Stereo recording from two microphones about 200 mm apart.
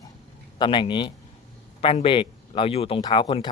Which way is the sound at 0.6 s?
25° left (ahead or behind).